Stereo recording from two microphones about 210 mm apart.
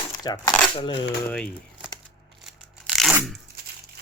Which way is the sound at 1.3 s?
5° left (ahead or behind).